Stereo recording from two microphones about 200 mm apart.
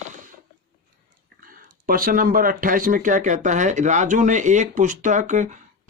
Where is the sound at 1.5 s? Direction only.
45° right (ahead or behind).